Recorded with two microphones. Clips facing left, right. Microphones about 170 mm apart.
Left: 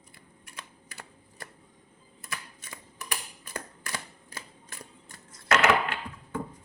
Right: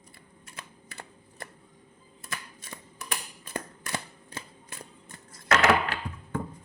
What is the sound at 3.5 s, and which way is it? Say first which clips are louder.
Shuffling cards: right 4 dB; 20° right (ahead or behind).